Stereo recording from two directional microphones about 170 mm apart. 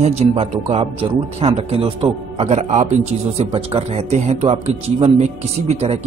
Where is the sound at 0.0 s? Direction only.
40° right (ahead or behind).